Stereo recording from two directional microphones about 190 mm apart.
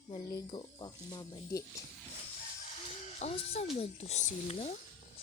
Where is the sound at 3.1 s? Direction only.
35° left (ahead or behind).